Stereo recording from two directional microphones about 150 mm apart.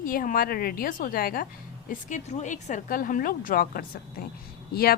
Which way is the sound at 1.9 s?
55° left (ahead or behind).